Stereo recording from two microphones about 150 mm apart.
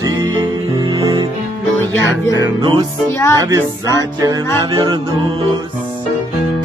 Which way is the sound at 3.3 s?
25° right (ahead or behind).